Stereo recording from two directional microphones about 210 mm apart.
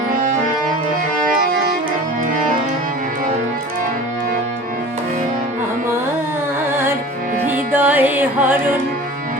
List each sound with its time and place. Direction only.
1.4 s music: 45° right (ahead or behind)
7.4 s music: 10° right (ahead or behind)